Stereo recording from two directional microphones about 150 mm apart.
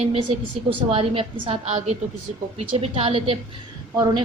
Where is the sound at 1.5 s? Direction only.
50° right (ahead or behind).